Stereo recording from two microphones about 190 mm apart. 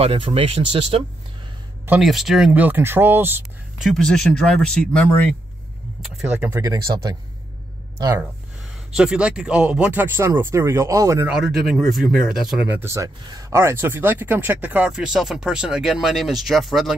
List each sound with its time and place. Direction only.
0.0 s speech: 30° right (ahead or behind)
1.9 s speech: centre (ahead or behind)
3.8 s speech: 5° left (ahead or behind)
6.0 s speech: 5° right (ahead or behind)
6.6 s speech: 20° right (ahead or behind)
8.9 s speech: 5° right (ahead or behind)
12.8 s speech: 15° right (ahead or behind); by 16.9 s centre (ahead or behind)